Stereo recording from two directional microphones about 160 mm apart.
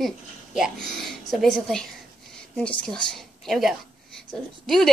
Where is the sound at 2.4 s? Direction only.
5° left (ahead or behind).